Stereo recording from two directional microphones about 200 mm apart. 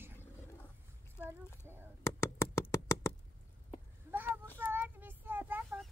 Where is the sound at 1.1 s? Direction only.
10° left (ahead or behind).